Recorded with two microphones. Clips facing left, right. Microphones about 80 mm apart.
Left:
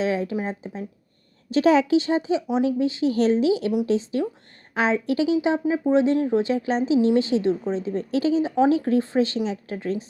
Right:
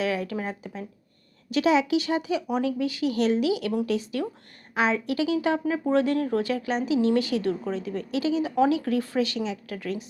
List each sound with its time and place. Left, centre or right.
0.0 s speech: left